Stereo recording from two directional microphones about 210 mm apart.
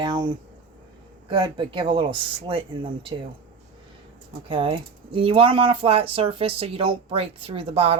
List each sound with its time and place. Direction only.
0.0 s speech: 20° right (ahead or behind)
4.4 s speech: 25° right (ahead or behind)